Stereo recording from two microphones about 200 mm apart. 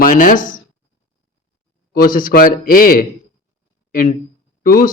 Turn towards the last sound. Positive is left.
turn(degrees=45)  # may be behind; listen again after turning